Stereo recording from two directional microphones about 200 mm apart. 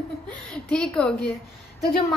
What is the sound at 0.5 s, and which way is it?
Speech, 5° left (ahead or behind).